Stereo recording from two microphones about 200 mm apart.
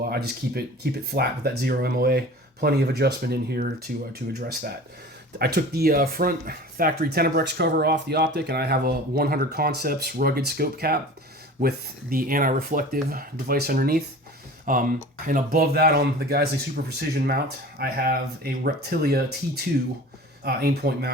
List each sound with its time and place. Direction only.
0.1 s speech: 50° right (ahead or behind)
14.6 s a sound: 40° right (ahead or behind)
15.3 s speech: 45° right (ahead or behind)